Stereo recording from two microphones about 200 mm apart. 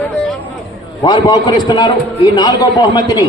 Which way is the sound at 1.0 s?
20° left (ahead or behind).